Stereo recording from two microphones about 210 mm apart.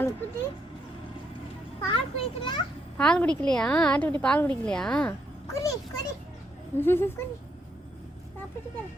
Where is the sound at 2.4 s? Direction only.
25° left (ahead or behind).